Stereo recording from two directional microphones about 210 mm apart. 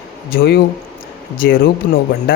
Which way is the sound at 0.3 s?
45° left (ahead or behind).